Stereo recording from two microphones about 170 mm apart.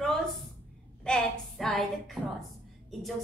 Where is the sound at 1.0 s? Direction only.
5° left (ahead or behind).